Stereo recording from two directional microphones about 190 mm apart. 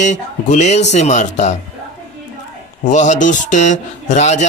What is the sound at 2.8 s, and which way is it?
Speech, 40° left (ahead or behind).